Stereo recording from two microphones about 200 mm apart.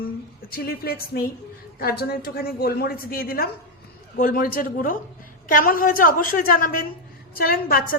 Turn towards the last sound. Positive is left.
turn(degrees=45)  # may be behind; listen again after turning